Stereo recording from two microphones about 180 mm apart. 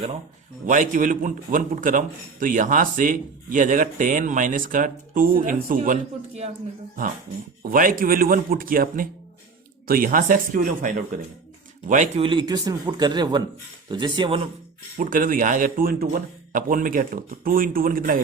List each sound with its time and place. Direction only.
0.6 s a man's voice: 45° right (ahead or behind)
7.6 s a man's voice: 50° right (ahead or behind)
12.2 s a man's voice: 25° right (ahead or behind)
14.9 s a man's voice: 50° right (ahead or behind)